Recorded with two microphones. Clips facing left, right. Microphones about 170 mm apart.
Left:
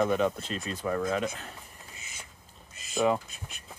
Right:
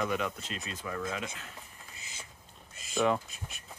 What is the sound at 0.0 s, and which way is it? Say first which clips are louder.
Speech: left 6 dB; 35° left (ahead or behind).